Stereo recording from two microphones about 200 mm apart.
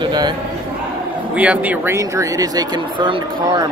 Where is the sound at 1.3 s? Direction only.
5° right (ahead or behind).